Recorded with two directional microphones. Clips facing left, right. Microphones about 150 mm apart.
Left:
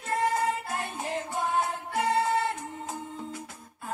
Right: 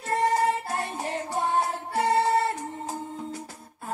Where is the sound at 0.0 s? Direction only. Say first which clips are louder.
Right 3 dB; 35° right (ahead or behind).